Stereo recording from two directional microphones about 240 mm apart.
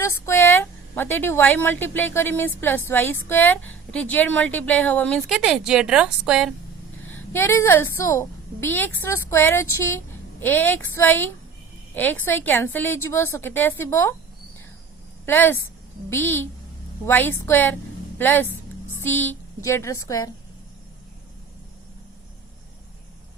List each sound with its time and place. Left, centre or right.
0.0 s a woman's voice: centre
7.0 s a sound: left
7.3 s a woman's voice: centre
15.3 s a woman's voice: centre